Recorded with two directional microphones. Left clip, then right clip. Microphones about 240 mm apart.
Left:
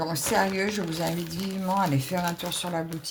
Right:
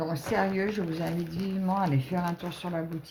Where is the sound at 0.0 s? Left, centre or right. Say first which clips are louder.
Left 3 dB; left.